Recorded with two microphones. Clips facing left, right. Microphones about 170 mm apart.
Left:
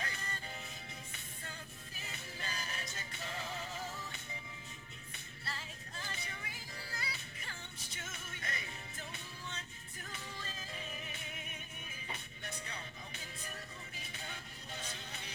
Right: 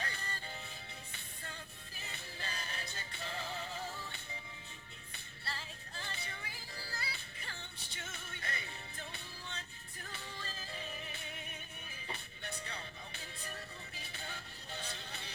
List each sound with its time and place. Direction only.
0.0 s music: 30° right (ahead or behind)
2.0 s music: 30° right (ahead or behind)